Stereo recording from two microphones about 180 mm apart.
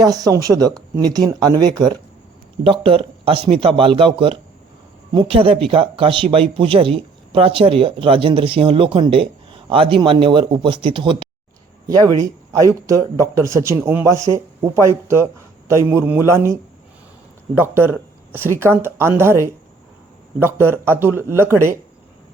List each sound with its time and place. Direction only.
0.0 s speech: 20° right (ahead or behind)